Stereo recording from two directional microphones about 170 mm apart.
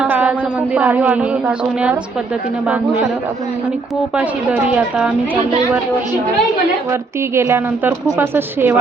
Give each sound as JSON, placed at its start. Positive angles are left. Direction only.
{"t": 0.0, "sound": "a woman's voice", "side_deg": -5}
{"t": 4.2, "sound": "a woman's voice", "side_deg": -10}
{"t": 7.3, "sound": "a woman's voice", "side_deg": -15}